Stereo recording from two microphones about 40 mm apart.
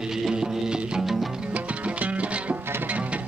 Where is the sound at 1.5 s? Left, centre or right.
Right.